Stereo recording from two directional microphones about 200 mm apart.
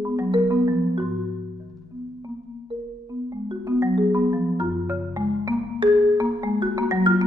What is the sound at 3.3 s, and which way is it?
Music, 15° right (ahead or behind).